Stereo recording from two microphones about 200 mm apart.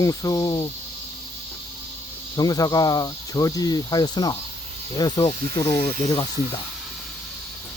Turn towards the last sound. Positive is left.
turn(degrees=20)  # may be behind; listen again after turning